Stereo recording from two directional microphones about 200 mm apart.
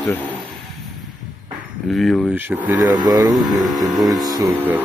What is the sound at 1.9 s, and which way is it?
Speech, centre (ahead or behind).